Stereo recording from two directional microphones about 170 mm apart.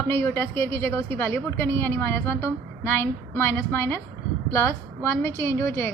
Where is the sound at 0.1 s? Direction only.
15° left (ahead or behind).